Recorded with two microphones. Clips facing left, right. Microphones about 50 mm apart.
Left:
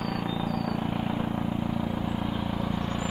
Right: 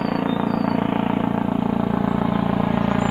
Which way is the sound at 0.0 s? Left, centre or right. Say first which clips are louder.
Right 9 dB; right.